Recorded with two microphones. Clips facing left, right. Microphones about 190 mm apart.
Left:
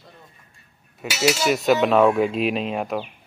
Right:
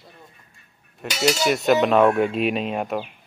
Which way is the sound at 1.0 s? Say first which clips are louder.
Even; 5° left (ahead or behind).